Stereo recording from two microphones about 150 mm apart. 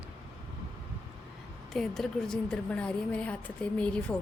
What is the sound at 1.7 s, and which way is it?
Speech, centre (ahead or behind).